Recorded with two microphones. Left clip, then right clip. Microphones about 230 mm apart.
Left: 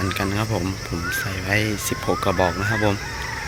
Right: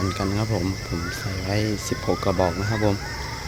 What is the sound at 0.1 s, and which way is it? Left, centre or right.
Speech, centre.